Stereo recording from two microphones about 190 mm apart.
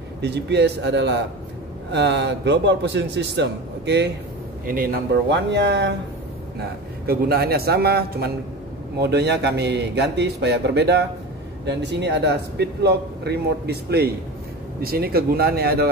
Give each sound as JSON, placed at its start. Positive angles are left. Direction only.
{"t": 0.2, "sound": "a man's voice", "side_deg": -60}
{"t": 4.6, "sound": "a man's voice", "side_deg": -50}
{"t": 7.1, "sound": "a man's voice", "side_deg": -55}